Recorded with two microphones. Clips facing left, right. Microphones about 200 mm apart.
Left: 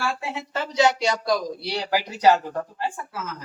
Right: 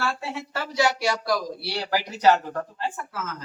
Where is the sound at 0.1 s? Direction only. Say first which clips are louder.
Left 1 dB; 15° left (ahead or behind).